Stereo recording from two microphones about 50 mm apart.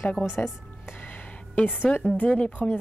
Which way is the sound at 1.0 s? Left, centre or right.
Left.